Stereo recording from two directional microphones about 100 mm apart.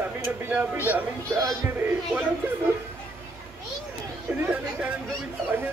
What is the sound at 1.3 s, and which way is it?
Music, 30° right (ahead or behind).